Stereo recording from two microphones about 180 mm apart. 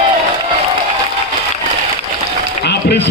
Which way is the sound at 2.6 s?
70° left (ahead or behind).